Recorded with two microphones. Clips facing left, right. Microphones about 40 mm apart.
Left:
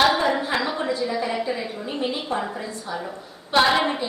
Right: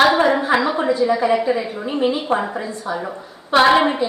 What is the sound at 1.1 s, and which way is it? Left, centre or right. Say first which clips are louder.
Speech: right 9 dB; right.